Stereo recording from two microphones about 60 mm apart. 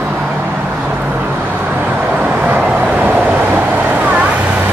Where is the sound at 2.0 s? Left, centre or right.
Centre.